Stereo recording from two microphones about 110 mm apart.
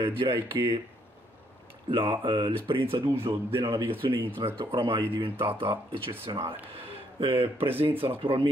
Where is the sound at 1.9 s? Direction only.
50° right (ahead or behind).